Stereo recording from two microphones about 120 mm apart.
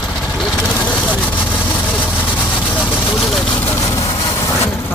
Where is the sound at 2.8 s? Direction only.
Centre (ahead or behind).